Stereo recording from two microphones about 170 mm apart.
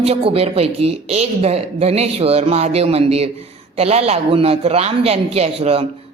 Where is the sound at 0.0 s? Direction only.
35° right (ahead or behind).